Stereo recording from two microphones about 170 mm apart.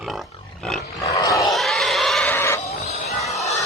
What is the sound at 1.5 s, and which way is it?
Pig, centre (ahead or behind).